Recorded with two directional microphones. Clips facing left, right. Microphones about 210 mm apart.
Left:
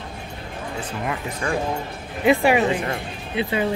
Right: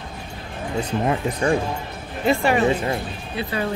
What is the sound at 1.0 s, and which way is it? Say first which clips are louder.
Speech: right 5 dB; 30° right (ahead or behind).